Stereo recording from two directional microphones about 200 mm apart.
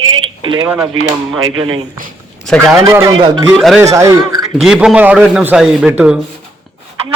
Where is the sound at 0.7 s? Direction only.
15° right (ahead or behind).